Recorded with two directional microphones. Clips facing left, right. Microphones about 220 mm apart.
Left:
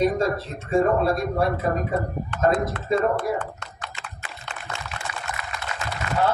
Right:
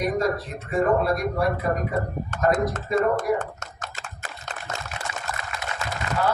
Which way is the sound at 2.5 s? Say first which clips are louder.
Right 1 dB; 45° right (ahead or behind).